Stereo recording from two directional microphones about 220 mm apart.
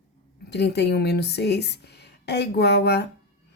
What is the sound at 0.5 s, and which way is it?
A woman's voice, 50° left (ahead or behind).